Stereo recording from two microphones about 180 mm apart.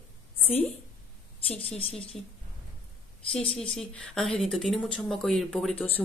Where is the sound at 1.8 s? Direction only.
30° left (ahead or behind).